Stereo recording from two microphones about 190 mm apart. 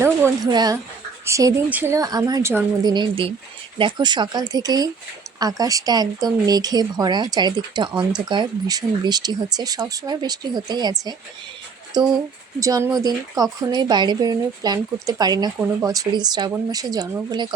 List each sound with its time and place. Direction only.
0.0 s a woman's voice: 15° right (ahead or behind)
2.9 s speech: 25° right (ahead or behind)
11.9 s speech: 20° right (ahead or behind)